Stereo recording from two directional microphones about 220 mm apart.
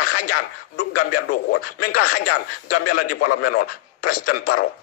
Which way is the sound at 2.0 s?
40° left (ahead or behind).